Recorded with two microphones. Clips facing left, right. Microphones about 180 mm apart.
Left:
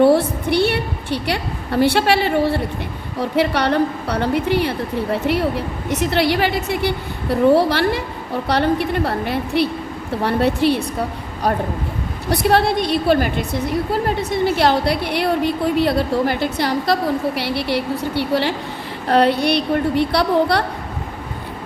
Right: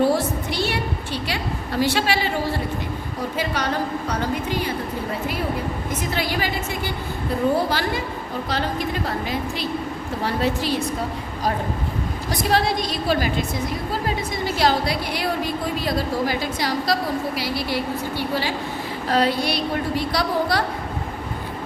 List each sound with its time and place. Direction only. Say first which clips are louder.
0.0 s a woman's voice: left 6 dB; 60° left (ahead or behind)
12.3 s a woman's voice: left 5 dB; 60° left (ahead or behind)